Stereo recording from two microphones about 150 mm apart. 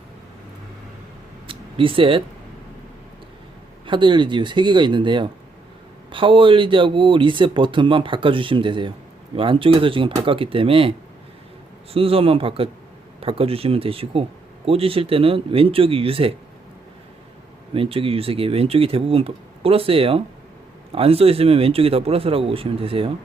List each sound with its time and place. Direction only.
1.5 s a sound: 35° right (ahead or behind)
3.8 s speech: 35° right (ahead or behind)
11.9 s speech: 40° right (ahead or behind)
17.7 s speech: 40° right (ahead or behind)